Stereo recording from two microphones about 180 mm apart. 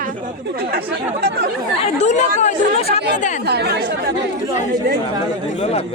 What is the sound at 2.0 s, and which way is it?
Speech, 40° left (ahead or behind).